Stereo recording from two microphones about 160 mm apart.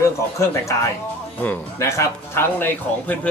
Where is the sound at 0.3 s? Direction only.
20° left (ahead or behind).